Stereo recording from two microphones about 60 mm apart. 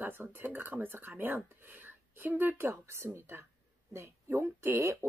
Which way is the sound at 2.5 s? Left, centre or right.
Right.